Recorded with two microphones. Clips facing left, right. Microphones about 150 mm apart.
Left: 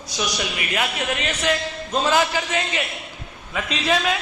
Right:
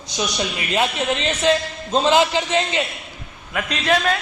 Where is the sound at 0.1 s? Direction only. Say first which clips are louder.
Right 2 dB; 25° right (ahead or behind).